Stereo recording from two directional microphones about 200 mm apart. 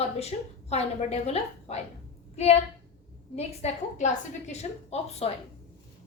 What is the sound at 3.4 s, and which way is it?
A woman's voice, 35° left (ahead or behind).